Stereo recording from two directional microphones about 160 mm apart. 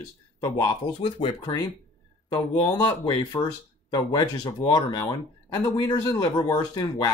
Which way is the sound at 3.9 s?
25° left (ahead or behind).